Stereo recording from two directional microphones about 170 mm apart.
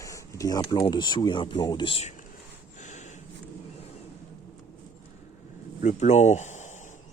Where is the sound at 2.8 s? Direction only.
45° left (ahead or behind).